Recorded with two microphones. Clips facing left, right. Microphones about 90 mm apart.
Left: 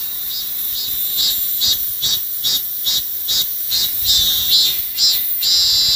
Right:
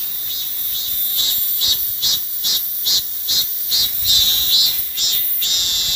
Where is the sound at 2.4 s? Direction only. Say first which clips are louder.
Left 1 dB; 50° left (ahead or behind).